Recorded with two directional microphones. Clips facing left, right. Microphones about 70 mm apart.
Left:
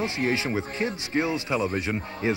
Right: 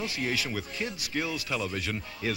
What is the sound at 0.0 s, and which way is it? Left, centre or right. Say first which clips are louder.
Speech: left 6 dB; left.